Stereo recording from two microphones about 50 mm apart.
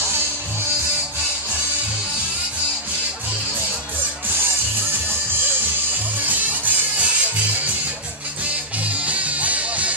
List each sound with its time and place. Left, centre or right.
6.2 s music: right
8.8 s music: right